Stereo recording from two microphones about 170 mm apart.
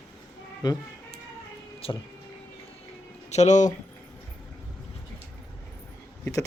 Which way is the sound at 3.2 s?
45° left (ahead or behind).